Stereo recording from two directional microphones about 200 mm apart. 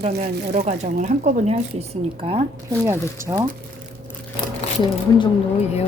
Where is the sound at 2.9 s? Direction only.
15° right (ahead or behind).